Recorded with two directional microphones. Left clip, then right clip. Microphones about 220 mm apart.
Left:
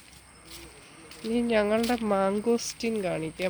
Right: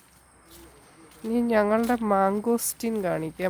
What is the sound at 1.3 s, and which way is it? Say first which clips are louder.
Speech: right 2 dB; 25° right (ahead or behind).